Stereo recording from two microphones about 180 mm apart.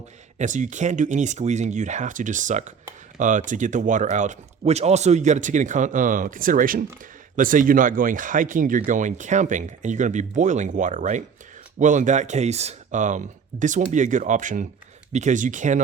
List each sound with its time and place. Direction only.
0.3 s speech: 45° right (ahead or behind)